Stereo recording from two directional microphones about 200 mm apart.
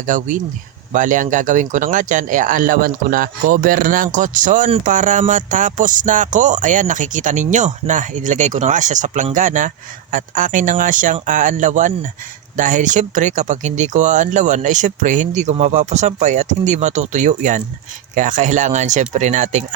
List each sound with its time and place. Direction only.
0.0 s speech: 40° right (ahead or behind)